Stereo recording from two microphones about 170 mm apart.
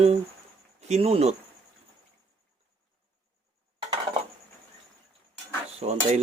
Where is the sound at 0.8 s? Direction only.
40° right (ahead or behind).